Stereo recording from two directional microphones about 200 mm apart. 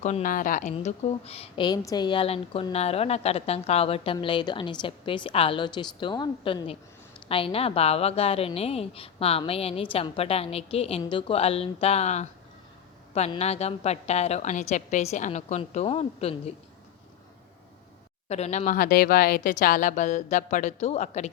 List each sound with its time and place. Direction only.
0.0 s a woman's voice: 40° left (ahead or behind)
18.3 s a woman's voice: 30° left (ahead or behind)